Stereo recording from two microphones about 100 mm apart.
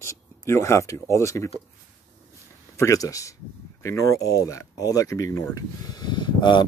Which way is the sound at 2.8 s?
30° left (ahead or behind).